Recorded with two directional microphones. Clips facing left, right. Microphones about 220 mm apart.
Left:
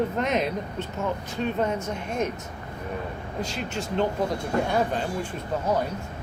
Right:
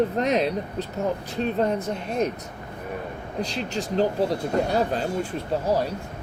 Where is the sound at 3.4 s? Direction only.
35° right (ahead or behind).